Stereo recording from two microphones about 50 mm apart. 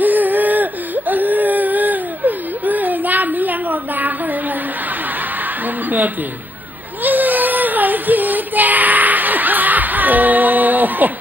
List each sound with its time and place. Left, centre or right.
0.0 s whimper: right
5.9 s a woman's voice: right
7.0 s child singing: right